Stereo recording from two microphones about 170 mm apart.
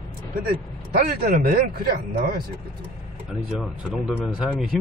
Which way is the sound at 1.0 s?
60° right (ahead or behind).